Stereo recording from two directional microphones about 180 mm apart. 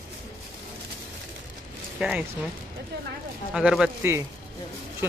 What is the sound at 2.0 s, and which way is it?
Speech, 5° right (ahead or behind).